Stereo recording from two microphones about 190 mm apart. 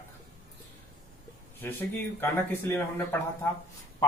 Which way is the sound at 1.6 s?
10° left (ahead or behind).